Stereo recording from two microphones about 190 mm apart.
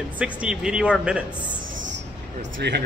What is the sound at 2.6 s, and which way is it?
Speech, 60° right (ahead or behind).